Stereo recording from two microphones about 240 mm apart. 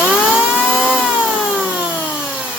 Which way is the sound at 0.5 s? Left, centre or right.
Centre.